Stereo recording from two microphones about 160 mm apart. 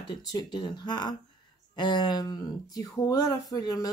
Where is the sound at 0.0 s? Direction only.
25° left (ahead or behind).